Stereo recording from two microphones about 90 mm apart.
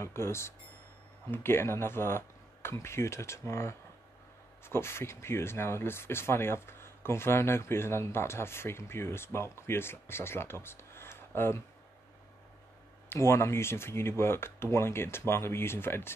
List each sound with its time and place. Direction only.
0.0 s speech: 30° left (ahead or behind)
13.1 s speech: 30° left (ahead or behind)